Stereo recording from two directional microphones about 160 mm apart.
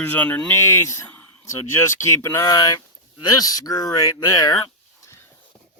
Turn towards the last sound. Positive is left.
turn(degrees=25)  # may be behind; listen again after turning